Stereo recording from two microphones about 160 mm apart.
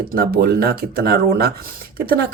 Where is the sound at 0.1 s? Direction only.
70° right (ahead or behind).